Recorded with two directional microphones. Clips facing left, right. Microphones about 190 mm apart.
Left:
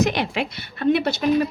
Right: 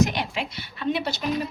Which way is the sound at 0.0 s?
85° left.